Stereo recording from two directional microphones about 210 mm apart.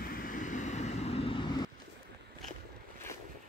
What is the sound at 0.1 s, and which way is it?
Vehicle, 40° left (ahead or behind).